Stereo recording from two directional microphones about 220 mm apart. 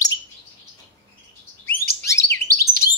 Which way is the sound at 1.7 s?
45° left (ahead or behind).